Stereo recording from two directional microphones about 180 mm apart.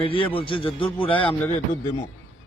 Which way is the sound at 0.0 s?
30° left (ahead or behind).